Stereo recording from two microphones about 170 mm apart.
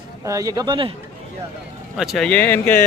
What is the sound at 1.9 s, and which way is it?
Speech, centre (ahead or behind).